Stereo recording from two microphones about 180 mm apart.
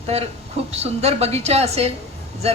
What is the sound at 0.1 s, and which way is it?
Speech, 35° right (ahead or behind).